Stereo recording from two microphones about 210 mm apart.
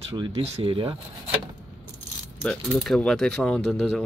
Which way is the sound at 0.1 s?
25° right (ahead or behind).